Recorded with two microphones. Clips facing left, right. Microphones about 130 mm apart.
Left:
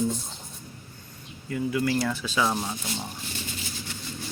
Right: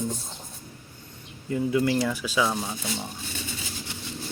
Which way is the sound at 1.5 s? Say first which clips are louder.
Right 2 dB; 25° right (ahead or behind).